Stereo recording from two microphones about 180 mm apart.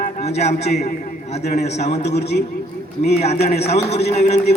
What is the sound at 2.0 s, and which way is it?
Speech, 70° left (ahead or behind).